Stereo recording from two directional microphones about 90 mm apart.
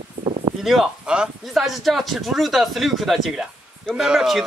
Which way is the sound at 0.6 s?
5° right (ahead or behind).